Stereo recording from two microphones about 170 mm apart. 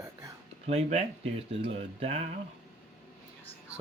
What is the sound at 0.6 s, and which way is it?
Speech, 40° right (ahead or behind).